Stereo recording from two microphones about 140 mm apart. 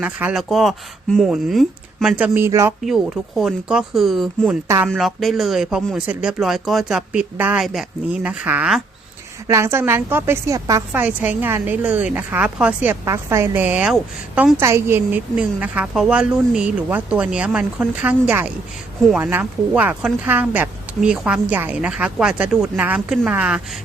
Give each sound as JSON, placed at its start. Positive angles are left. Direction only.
{"t": 0.0, "sound": "speech", "side_deg": -10}
{"t": 2.8, "sound": "a woman's voice", "side_deg": 0}
{"t": 10.9, "sound": "a woman's voice", "side_deg": -10}
{"t": 14.6, "sound": "a woman's voice", "side_deg": -20}